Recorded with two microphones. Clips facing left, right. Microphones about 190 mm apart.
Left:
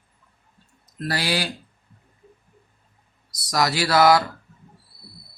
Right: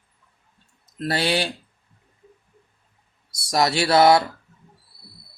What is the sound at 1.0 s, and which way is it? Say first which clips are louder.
Speech: right 3 dB; 25° right (ahead or behind).